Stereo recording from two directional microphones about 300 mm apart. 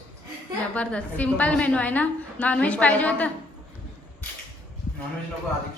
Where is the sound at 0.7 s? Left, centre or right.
Centre.